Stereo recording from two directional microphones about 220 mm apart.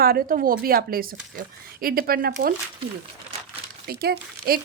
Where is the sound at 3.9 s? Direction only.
45° right (ahead or behind).